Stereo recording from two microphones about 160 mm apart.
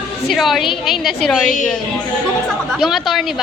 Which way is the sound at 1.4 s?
55° left (ahead or behind).